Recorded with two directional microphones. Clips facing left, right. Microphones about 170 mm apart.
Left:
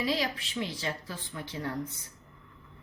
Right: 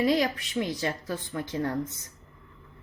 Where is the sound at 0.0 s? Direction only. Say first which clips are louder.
Right 6 dB; 50° right (ahead or behind).